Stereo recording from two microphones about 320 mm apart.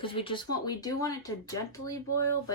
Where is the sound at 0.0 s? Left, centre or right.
Centre.